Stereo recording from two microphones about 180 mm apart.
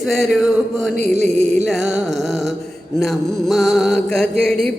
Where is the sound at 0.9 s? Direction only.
40° right (ahead or behind).